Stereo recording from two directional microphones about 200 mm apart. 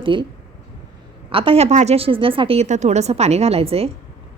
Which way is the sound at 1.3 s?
25° right (ahead or behind).